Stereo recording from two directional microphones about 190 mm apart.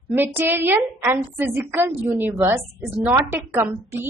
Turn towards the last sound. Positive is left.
turn(degrees=-10)  # may be behind; listen again after turning